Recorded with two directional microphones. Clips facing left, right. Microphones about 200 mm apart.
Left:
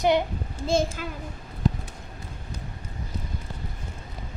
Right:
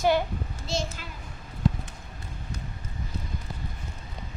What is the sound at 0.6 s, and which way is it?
Speech, 50° left (ahead or behind).